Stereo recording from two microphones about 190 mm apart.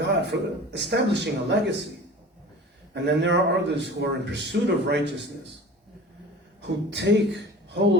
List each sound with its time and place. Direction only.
0.0 s a man's voice: 65° right (ahead or behind)
2.9 s a man's voice: 65° right (ahead or behind)
6.6 s a man's voice: 65° right (ahead or behind)